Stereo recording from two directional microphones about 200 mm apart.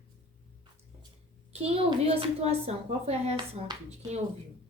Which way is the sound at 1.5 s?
30° right (ahead or behind).